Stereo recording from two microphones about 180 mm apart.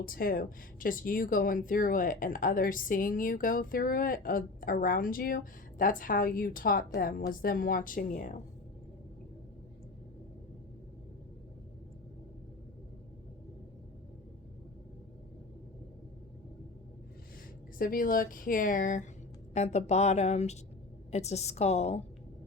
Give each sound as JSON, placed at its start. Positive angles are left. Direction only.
{"t": 0.0, "sound": "speech", "side_deg": 50}
{"t": 17.7, "sound": "speech", "side_deg": 50}